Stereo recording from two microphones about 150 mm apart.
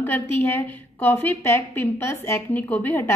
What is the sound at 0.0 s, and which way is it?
A woman's voice, 15° left (ahead or behind).